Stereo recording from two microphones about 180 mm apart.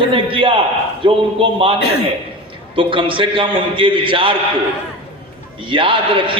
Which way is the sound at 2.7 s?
30° right (ahead or behind).